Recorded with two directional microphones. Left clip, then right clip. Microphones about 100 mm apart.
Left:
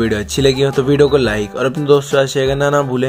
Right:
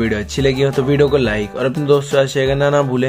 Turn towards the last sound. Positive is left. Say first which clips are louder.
# even
turn(degrees=0)  # may be behind; listen again after turning